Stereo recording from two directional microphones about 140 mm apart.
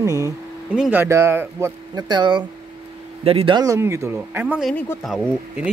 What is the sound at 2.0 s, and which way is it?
Speech, 30° right (ahead or behind).